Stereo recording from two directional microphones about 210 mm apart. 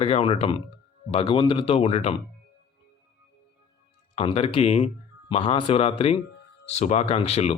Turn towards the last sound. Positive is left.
turn(degrees=30)  # may be behind; listen again after turning